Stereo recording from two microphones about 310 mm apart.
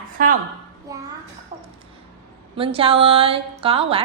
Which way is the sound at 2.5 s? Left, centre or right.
Centre.